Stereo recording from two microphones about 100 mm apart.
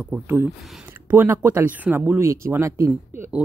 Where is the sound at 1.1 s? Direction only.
20° right (ahead or behind).